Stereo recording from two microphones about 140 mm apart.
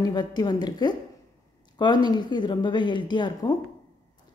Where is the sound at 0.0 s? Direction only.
30° left (ahead or behind).